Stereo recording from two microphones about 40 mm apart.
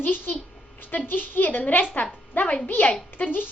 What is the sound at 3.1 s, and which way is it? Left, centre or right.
Speech, left.